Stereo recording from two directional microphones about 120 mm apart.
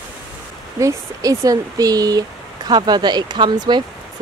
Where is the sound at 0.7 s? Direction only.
25° right (ahead or behind).